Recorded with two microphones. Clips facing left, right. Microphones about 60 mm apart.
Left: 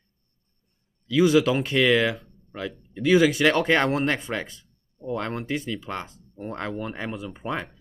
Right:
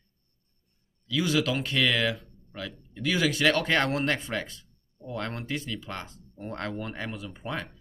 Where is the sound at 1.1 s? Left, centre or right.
Centre.